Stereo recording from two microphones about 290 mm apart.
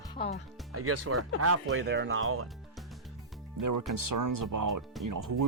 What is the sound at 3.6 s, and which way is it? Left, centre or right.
Speech, right.